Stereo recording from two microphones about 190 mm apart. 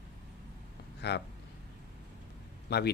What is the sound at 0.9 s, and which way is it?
Speech, 60° left (ahead or behind).